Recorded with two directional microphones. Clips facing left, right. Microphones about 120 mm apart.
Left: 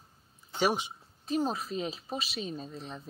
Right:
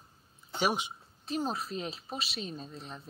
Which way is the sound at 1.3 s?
Centre (ahead or behind).